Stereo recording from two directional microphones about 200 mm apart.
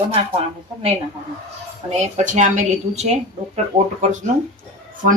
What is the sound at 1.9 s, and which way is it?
Speech, 35° right (ahead or behind).